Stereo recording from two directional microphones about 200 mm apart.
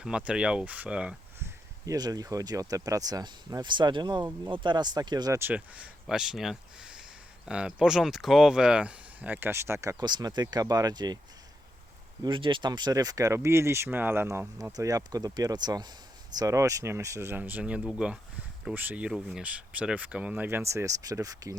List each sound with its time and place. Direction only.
0.0 s speech: 5° right (ahead or behind)
12.2 s speech: 25° right (ahead or behind)